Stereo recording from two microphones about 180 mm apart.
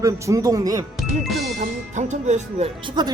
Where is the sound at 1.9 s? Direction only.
40° right (ahead or behind); by 3.1 s 25° right (ahead or behind).